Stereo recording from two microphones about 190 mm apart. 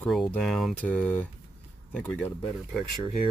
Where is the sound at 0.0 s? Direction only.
Centre (ahead or behind).